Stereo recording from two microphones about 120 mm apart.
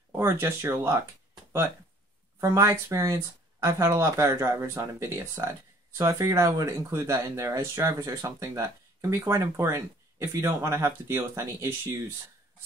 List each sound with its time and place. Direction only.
0.1 s speech: 20° right (ahead or behind)
2.4 s speech: 25° right (ahead or behind)